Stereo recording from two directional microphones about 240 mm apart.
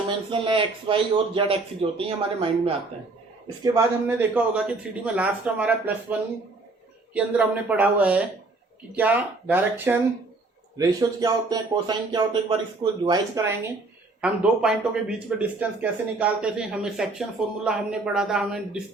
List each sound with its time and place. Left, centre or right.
0.3 s speech: right
14.2 s speech: centre